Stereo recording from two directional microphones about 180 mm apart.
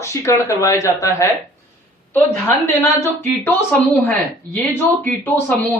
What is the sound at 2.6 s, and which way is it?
Speech, 15° left (ahead or behind).